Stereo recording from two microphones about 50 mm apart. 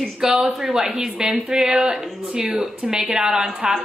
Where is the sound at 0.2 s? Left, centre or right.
Centre.